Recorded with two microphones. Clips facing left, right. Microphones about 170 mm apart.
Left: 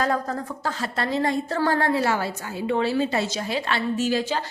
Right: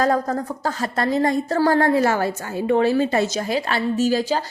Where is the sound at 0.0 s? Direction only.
40° right (ahead or behind).